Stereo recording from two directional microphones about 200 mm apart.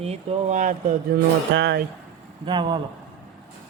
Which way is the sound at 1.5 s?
60° right (ahead or behind).